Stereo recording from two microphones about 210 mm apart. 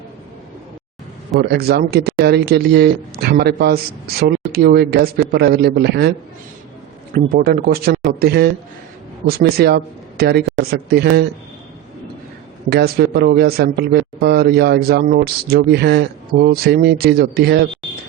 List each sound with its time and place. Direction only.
1.4 s speech: 50° right (ahead or behind)
12.7 s speech: 50° right (ahead or behind)